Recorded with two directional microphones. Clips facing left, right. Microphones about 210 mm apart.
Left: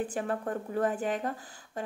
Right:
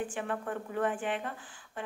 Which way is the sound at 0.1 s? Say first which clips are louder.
Left 3 dB; 40° left (ahead or behind).